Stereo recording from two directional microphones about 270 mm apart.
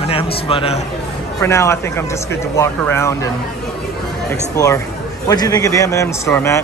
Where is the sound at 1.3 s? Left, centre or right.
Centre.